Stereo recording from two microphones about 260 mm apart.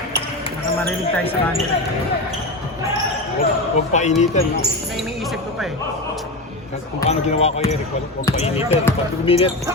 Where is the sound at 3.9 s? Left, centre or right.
Left.